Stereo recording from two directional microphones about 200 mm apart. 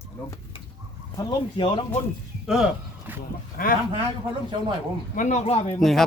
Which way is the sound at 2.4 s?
5° right (ahead or behind).